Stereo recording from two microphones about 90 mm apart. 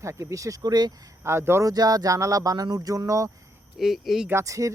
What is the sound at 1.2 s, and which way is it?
Speech, 30° right (ahead or behind).